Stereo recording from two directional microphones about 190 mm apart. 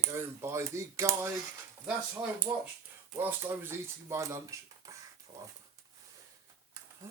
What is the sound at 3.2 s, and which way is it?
Speech, 10° right (ahead or behind).